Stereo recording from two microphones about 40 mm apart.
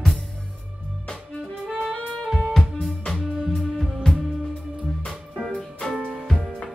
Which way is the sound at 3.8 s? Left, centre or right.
Centre.